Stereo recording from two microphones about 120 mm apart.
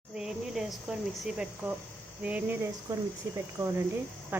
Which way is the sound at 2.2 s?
15° right (ahead or behind).